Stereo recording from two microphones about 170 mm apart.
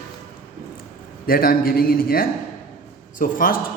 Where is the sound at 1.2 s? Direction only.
60° left (ahead or behind).